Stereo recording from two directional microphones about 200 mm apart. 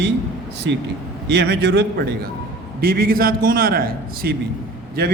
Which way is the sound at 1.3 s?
55° right (ahead or behind).